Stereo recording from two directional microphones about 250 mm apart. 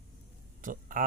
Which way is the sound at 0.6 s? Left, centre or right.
Right.